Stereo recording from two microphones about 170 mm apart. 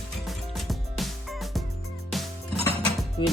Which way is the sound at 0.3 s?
Centre (ahead or behind).